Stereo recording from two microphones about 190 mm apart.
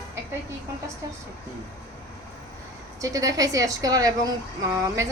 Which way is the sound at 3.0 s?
20° right (ahead or behind).